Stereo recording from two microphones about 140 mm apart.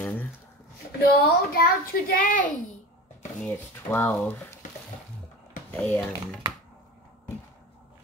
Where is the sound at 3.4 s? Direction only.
10° left (ahead or behind).